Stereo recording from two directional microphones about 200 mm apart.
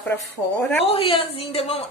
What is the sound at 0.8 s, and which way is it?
A woman's voice, 30° left (ahead or behind).